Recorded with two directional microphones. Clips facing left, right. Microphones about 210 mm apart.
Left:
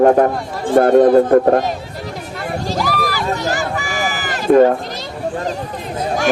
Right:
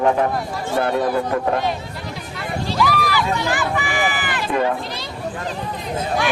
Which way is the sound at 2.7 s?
45° left (ahead or behind).